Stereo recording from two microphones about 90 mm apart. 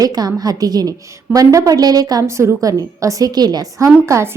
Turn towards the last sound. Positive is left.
turn(degrees=-35)  # may be behind; listen again after turning